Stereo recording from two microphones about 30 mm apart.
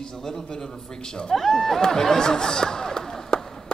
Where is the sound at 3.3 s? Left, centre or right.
Left.